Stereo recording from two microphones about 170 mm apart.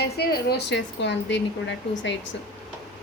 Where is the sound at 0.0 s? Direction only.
70° left (ahead or behind); by 2.3 s 90° left.